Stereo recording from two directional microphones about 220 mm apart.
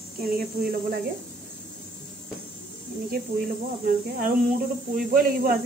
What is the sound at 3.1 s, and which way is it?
A woman's voice, 45° right (ahead or behind).